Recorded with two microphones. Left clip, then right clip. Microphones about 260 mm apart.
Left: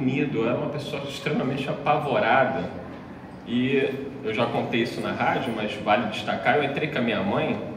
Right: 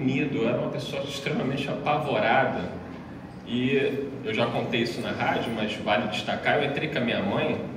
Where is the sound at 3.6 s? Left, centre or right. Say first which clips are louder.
Left 1 dB; left.